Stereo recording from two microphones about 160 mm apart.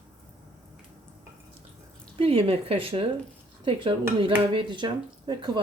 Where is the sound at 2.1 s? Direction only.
35° right (ahead or behind).